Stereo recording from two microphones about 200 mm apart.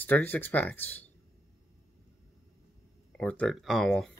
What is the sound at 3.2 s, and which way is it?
Speech, 5° left (ahead or behind).